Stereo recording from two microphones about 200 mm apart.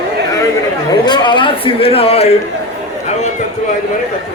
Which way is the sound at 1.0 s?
20° left (ahead or behind).